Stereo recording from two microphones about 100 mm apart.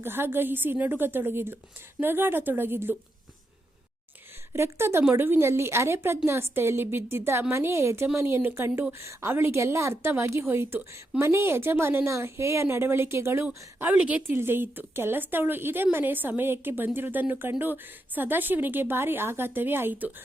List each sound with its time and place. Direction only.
0.0 s a woman's voice: 20° right (ahead or behind)
4.5 s a woman's voice: 25° right (ahead or behind)